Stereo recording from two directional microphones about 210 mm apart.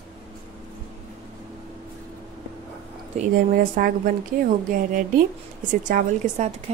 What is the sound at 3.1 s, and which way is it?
A woman's voice, 40° right (ahead or behind).